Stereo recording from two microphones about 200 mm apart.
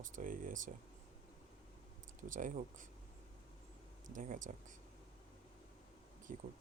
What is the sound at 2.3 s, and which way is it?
Speech, 40° right (ahead or behind).